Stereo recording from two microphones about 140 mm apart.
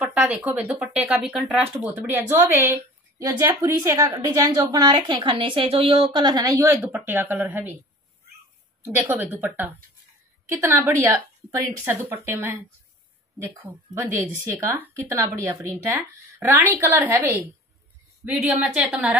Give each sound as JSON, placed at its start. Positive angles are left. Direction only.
{"t": 0.0, "sound": "a woman's voice", "side_deg": -10}
{"t": 6.7, "sound": "a woman's voice", "side_deg": -15}
{"t": 8.8, "sound": "a woman's voice", "side_deg": -15}
{"t": 13.7, "sound": "a woman's voice", "side_deg": -20}